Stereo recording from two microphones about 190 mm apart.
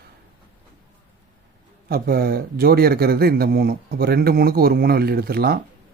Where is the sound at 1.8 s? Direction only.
55° right (ahead or behind).